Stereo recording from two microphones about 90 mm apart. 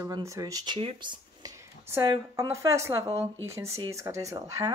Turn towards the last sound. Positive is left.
turn(degrees=-35)  # may be behind; listen again after turning